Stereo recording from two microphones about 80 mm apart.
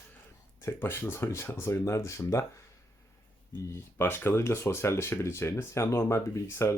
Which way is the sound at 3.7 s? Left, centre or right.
Left.